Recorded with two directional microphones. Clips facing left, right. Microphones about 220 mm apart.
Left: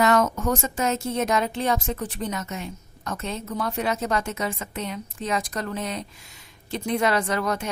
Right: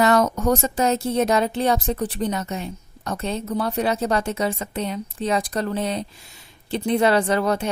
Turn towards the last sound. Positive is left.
turn(degrees=-30)  # may be behind; listen again after turning